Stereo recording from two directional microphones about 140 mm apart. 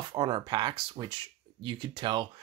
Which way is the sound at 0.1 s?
35° right (ahead or behind).